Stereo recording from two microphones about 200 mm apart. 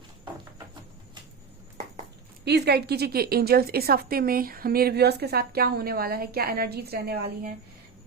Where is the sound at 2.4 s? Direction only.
55° right (ahead or behind).